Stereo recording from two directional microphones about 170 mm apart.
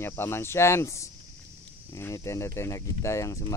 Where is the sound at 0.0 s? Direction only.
15° left (ahead or behind).